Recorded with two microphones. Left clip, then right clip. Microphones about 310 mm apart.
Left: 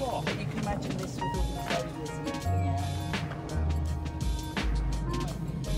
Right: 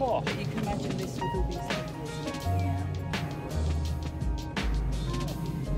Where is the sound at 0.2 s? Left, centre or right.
Centre.